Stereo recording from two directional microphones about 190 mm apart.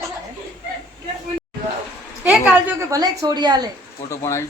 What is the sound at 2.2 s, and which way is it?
Speech, 5° right (ahead or behind).